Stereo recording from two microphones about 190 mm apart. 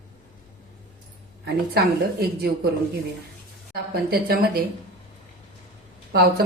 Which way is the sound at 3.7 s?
55° right (ahead or behind).